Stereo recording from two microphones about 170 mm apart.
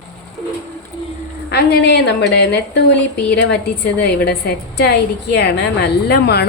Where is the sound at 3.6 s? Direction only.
75° left (ahead or behind).